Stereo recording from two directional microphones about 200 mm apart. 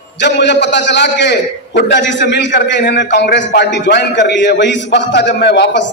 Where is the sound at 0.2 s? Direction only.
60° left (ahead or behind).